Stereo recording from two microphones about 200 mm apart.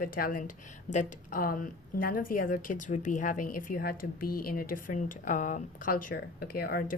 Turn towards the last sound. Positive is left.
turn(degrees=50)  # may be behind; listen again after turning